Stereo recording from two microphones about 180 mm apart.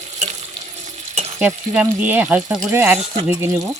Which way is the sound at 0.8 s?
40° right (ahead or behind).